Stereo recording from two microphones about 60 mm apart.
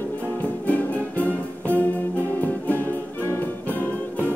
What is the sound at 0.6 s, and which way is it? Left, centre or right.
Music, left.